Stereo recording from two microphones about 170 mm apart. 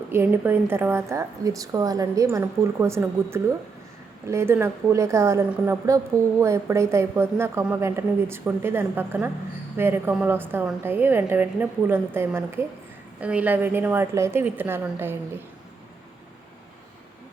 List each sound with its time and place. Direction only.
0.1 s a woman's voice: 10° right (ahead or behind)